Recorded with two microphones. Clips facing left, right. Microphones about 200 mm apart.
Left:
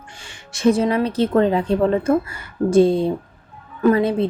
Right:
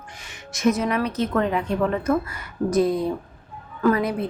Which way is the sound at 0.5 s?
30° left (ahead or behind).